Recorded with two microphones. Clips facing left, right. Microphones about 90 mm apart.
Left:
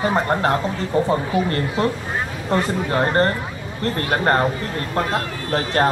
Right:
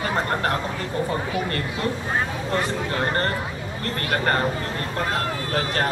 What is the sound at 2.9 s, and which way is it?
Speech, 30° left (ahead or behind).